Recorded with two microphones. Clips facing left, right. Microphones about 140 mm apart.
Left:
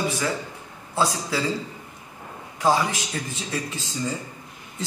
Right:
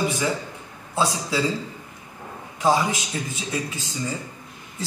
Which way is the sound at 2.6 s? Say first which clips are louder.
Right 1 dB; 15° right (ahead or behind).